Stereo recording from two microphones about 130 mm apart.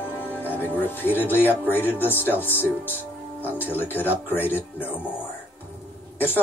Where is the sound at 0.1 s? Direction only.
15° left (ahead or behind).